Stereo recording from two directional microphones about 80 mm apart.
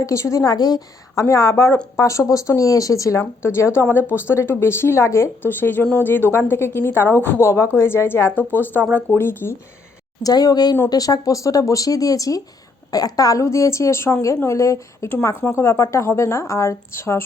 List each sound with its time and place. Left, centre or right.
0.0 s speech: left
1.1 s a woman's voice: left
10.2 s speech: left